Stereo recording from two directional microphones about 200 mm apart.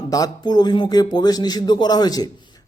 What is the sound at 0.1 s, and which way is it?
Speech, 20° left (ahead or behind).